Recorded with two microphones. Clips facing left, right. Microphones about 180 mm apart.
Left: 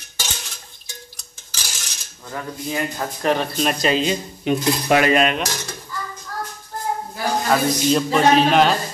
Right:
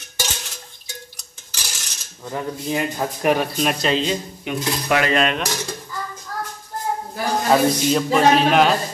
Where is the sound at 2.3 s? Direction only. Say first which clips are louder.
Right 2 dB; 15° right (ahead or behind); by 4.1 s 5° left (ahead or behind).